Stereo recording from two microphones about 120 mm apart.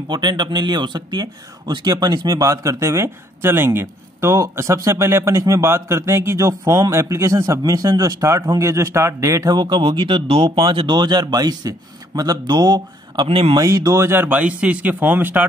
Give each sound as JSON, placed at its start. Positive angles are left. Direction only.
{"t": 0.1, "sound": "a man's voice", "side_deg": -35}
{"t": 13.6, "sound": "speech", "side_deg": -25}